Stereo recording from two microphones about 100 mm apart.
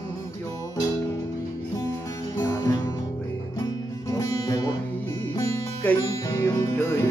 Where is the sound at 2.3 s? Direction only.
30° left (ahead or behind).